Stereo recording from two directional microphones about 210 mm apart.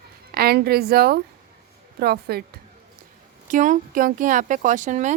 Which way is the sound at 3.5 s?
40° right (ahead or behind).